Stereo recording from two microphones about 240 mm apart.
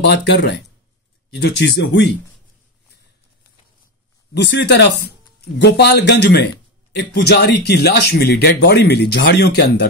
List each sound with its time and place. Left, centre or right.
0.0 s speech: left
4.3 s speech: left